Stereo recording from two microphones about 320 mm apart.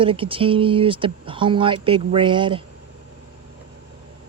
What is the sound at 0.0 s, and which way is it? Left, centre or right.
Speech, centre.